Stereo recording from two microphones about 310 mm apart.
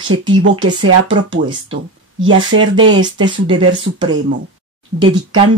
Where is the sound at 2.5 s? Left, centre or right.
Centre.